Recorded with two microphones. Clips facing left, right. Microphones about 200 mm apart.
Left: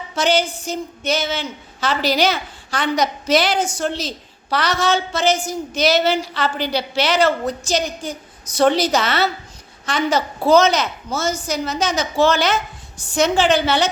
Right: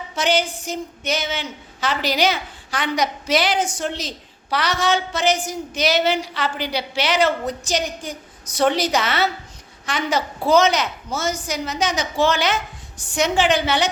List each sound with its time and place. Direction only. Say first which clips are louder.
0.2 s a woman's voice: left 2 dB; 15° right (ahead or behind)